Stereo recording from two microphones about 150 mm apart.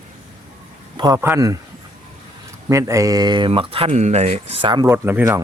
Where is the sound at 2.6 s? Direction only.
20° right (ahead or behind).